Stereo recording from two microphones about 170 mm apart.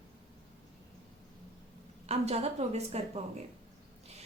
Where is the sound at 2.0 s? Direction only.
40° right (ahead or behind).